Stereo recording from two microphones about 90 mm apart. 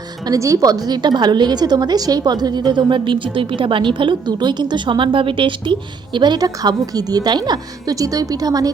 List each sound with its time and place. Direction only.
0.3 s a woman's voice: 35° right (ahead or behind); by 5.7 s 70° right (ahead or behind)
6.1 s a woman's voice: 55° right (ahead or behind)